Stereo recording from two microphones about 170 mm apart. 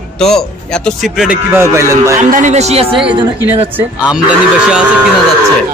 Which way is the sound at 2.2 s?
45° right (ahead or behind).